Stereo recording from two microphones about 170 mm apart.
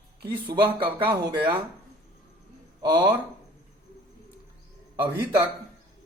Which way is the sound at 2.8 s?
25° right (ahead or behind).